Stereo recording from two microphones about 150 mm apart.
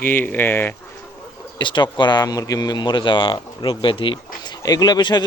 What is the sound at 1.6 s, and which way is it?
Speech, 30° left (ahead or behind).